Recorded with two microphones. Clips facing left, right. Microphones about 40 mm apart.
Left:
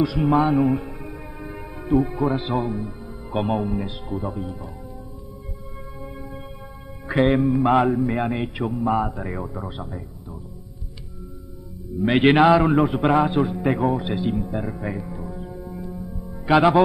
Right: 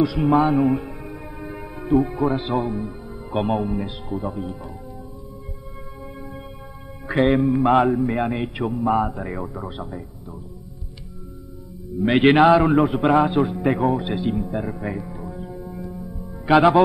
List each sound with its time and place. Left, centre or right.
0.0 s a man's voice: centre
7.2 s speech: centre
12.0 s a man's voice: centre
15.9 s music: centre
16.4 s speech: centre